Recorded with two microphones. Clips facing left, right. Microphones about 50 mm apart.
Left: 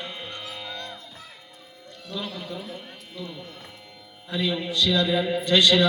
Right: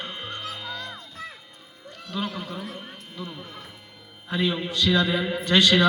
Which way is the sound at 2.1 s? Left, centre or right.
Right.